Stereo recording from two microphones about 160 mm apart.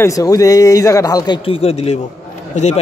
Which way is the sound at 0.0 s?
20° left (ahead or behind).